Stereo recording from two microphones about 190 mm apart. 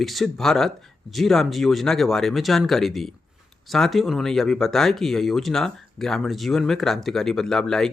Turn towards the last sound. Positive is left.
turn(degrees=5)  # may be behind; listen again after turning